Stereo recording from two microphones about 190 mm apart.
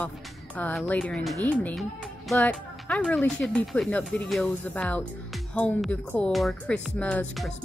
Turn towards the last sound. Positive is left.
turn(degrees=5)  # may be behind; listen again after turning